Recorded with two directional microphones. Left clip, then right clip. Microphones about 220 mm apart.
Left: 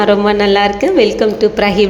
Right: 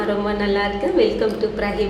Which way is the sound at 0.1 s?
35° left (ahead or behind).